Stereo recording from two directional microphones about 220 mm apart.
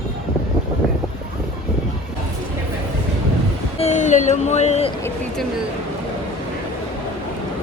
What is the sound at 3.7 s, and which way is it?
Speech, 30° left (ahead or behind).